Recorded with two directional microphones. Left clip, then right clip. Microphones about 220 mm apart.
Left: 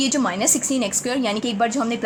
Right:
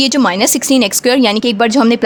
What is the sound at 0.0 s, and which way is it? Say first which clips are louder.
Speech: right 9 dB; 45° right (ahead or behind).